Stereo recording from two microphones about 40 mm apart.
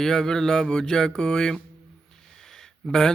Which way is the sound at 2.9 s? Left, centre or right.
Centre.